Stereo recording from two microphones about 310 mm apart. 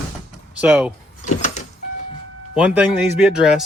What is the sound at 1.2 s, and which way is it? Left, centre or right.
Vehicle, left.